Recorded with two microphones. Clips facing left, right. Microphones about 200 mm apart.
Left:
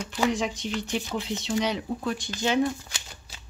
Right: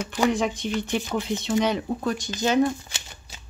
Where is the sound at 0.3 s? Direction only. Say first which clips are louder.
Right 3 dB; 55° right (ahead or behind).